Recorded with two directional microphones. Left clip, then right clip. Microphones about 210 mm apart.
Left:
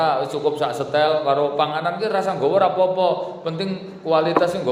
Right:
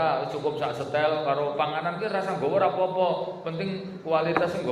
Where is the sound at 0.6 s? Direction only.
50° left (ahead or behind).